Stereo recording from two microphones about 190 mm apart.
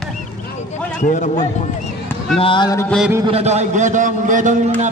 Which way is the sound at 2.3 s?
25° left (ahead or behind).